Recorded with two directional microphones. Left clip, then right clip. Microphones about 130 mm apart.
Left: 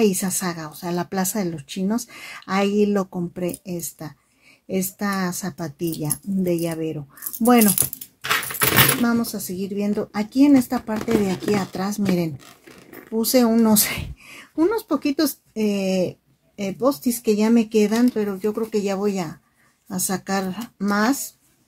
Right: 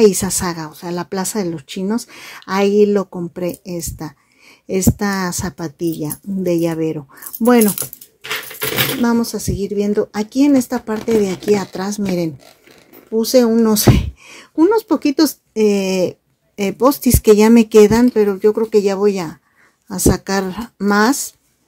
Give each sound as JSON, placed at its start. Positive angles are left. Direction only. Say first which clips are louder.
{"t": 0.0, "sound": "speech", "louder": "right 8 dB", "side_deg": -40}
{"t": 0.7, "sound": "speech", "louder": "right 3 dB", "side_deg": -25}
{"t": 5.8, "sound": "speech", "louder": "right 7 dB", "side_deg": -30}
{"t": 7.4, "sound": "speech", "louder": "right 4 dB", "side_deg": -30}
{"t": 9.0, "sound": "speech", "louder": "right 6 dB", "side_deg": -45}
{"t": 13.1, "sound": "speech", "louder": "right 6 dB", "side_deg": -25}